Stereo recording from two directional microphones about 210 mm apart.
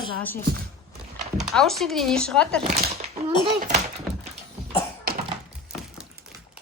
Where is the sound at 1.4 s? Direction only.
Centre (ahead or behind).